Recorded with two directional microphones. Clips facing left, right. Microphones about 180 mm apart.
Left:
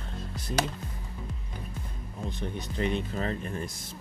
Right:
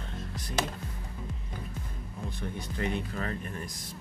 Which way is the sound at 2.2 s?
20° left (ahead or behind).